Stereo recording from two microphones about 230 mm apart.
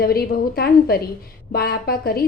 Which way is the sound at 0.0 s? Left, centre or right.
Left.